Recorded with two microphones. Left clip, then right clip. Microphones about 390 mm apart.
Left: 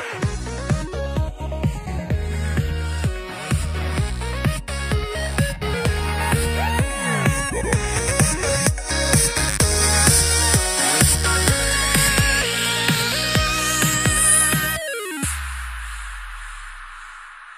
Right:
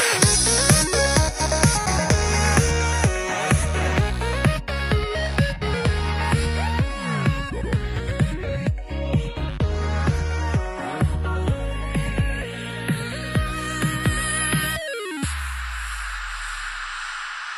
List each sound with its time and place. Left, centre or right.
0.0 s music: right
1.6 s music: right; by 9.1 s left
9.1 s music: left; by 15.2 s centre